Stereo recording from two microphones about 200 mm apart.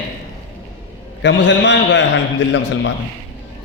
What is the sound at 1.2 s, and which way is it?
Speech, 65° left (ahead or behind).